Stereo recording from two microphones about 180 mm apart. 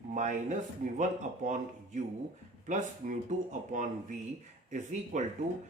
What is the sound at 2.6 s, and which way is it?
Speech, 45° right (ahead or behind).